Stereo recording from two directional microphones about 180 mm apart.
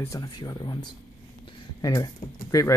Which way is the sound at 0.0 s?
20° left (ahead or behind).